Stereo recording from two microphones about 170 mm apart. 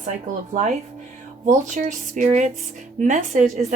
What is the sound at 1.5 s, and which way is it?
Speech, 50° right (ahead or behind).